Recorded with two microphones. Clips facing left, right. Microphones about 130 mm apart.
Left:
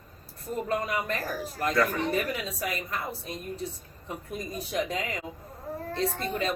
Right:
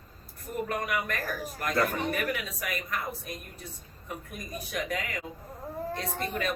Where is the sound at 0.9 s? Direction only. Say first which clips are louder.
Left 1 dB; 30° left (ahead or behind).